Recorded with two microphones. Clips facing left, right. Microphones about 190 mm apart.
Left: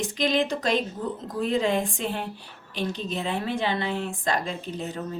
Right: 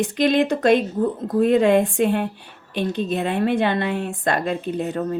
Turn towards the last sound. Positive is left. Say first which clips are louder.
# right 8 dB
turn(degrees=-60)  # may be behind; listen again after turning